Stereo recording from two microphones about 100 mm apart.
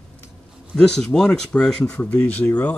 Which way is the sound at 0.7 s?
5° left (ahead or behind).